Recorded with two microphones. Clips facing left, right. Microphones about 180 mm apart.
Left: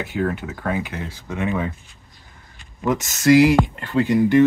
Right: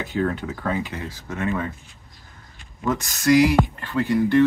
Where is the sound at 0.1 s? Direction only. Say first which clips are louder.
Right 2 dB; 5° left (ahead or behind).